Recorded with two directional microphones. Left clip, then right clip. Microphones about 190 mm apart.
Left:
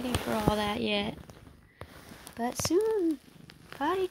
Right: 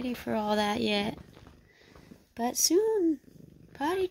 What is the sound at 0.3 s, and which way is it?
Speech, 25° right (ahead or behind).